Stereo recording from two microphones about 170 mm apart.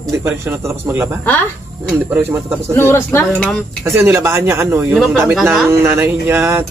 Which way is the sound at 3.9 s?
15° right (ahead or behind).